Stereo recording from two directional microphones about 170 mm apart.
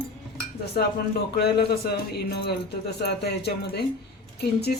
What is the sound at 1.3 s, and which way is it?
Speech, 70° left (ahead or behind).